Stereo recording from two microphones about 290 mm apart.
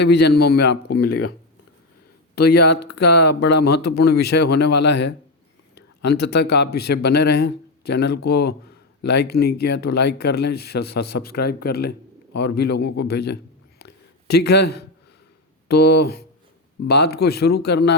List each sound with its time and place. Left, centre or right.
0.0 s speech: left
2.3 s a man's voice: left